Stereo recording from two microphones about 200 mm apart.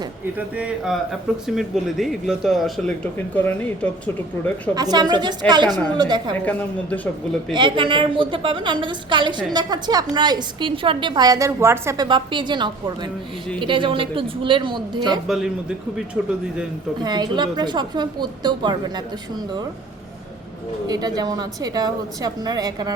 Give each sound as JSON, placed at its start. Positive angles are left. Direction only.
{"t": 0.3, "sound": "speech", "side_deg": -5}
{"t": 4.7, "sound": "a woman's voice", "side_deg": -20}
{"t": 6.4, "sound": "a woman's voice", "side_deg": 5}
{"t": 7.5, "sound": "a woman's voice", "side_deg": -25}
{"t": 15.3, "sound": "speech", "side_deg": 0}
{"t": 17.0, "sound": "a woman's voice", "side_deg": -20}
{"t": 20.8, "sound": "a woman's voice", "side_deg": -20}